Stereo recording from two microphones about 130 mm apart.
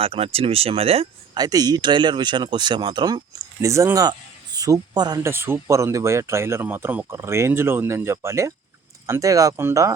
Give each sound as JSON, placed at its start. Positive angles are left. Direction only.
{"t": 0.0, "sound": "speech", "side_deg": -45}
{"t": 1.4, "sound": "speech", "side_deg": -30}
{"t": 3.6, "sound": "speech", "side_deg": -25}
{"t": 5.2, "sound": "speech", "side_deg": -20}